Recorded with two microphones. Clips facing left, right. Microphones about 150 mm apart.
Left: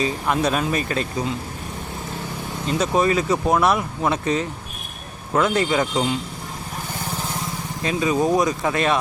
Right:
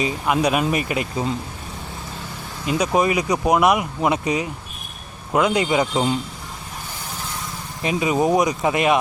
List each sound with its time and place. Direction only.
0.3 s speech: 15° right (ahead or behind)
2.6 s speech: 15° right (ahead or behind)
7.8 s speech: 15° right (ahead or behind)